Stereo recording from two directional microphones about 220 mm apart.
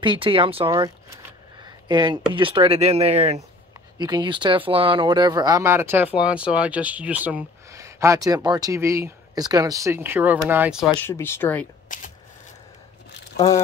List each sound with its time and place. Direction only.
0.0 s speech: 25° right (ahead or behind); by 10.9 s 5° right (ahead or behind)
10.9 s speech: 10° left (ahead or behind)
11.9 s shuffling cards: 35° left (ahead or behind)